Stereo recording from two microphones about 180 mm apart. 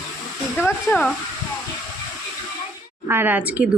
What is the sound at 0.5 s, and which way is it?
Speech, 10° left (ahead or behind).